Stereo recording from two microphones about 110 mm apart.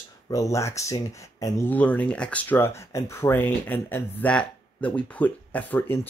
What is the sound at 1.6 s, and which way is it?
Speech, 15° left (ahead or behind).